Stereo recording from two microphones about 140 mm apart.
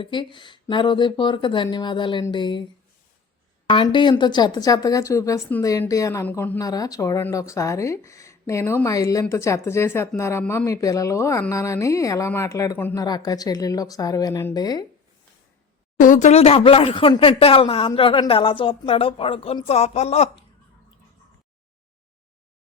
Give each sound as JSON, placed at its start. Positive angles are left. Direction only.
{"t": 0.0, "sound": "speech", "side_deg": 35}
{"t": 3.7, "sound": "speech", "side_deg": 35}
{"t": 6.2, "sound": "a woman's voice", "side_deg": 10}
{"t": 6.6, "sound": "speech", "side_deg": 25}
{"t": 10.4, "sound": "a woman's voice", "side_deg": 10}
{"t": 10.7, "sound": "speech", "side_deg": 25}
{"t": 16.0, "sound": "speech", "side_deg": 65}